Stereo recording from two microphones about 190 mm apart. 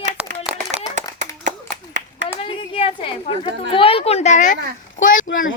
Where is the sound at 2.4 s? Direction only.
30° left (ahead or behind).